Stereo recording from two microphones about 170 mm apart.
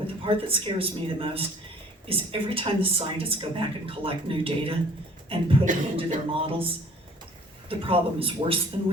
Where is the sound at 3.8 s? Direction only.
35° right (ahead or behind).